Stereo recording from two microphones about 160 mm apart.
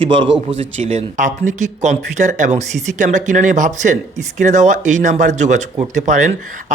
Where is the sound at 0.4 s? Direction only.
40° right (ahead or behind).